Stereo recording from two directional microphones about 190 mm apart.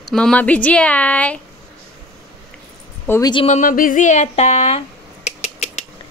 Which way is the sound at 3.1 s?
20° left (ahead or behind).